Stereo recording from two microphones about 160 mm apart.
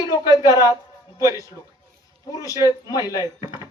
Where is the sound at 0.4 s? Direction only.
20° left (ahead or behind).